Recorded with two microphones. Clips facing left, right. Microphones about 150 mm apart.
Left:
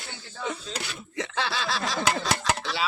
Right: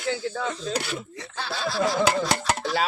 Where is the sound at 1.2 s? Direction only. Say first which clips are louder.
Left 7 dB; 85° left.